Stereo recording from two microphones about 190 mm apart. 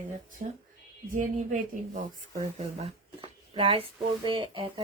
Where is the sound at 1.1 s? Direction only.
40° right (ahead or behind).